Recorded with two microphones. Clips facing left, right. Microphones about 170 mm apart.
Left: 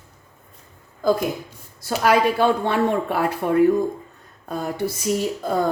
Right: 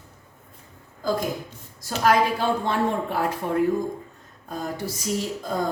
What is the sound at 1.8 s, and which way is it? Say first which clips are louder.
Speech: left 2 dB; 65° left (ahead or behind).